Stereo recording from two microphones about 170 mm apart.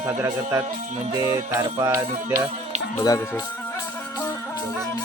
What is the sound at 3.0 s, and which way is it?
Speech, 20° left (ahead or behind).